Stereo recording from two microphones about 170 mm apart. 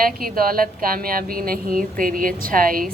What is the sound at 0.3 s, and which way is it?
Speech, 60° right (ahead or behind).